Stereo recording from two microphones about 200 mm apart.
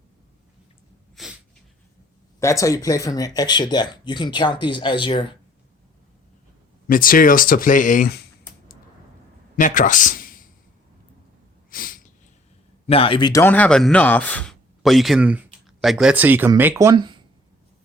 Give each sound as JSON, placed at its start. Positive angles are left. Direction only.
{"t": 1.1, "sound": "a sound", "side_deg": 0}
{"t": 2.4, "sound": "speech", "side_deg": 15}
{"t": 6.8, "sound": "speech", "side_deg": 45}
{"t": 9.6, "sound": "a man's voice", "side_deg": 40}
{"t": 11.7, "sound": "a sound", "side_deg": 45}
{"t": 12.9, "sound": "speech", "side_deg": 25}